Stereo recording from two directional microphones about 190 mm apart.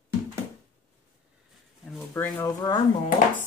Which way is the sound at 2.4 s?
20° left (ahead or behind).